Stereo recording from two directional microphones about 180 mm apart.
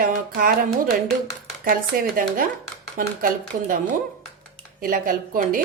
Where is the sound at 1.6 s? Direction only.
50° right (ahead or behind).